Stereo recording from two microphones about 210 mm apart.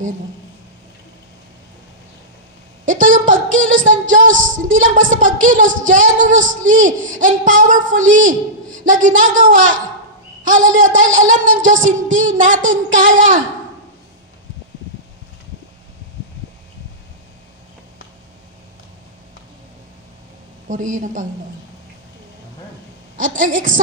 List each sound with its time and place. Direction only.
2.8 s female singing: 40° right (ahead or behind)
20.6 s female singing: 40° right (ahead or behind)
23.1 s female singing: 40° right (ahead or behind)